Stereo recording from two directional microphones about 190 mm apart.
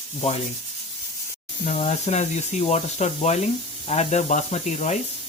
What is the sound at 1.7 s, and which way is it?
Speech, 35° left (ahead or behind).